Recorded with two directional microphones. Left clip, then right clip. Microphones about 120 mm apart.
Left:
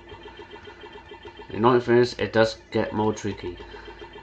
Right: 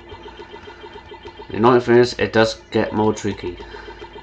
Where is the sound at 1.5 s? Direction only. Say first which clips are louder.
Right 5 dB; 10° right (ahead or behind).